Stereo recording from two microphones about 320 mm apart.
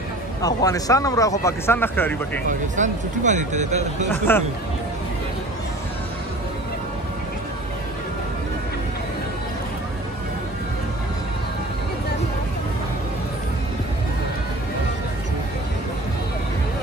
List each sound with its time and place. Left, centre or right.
0.4 s speech: centre
2.7 s speech: right
4.3 s speech: centre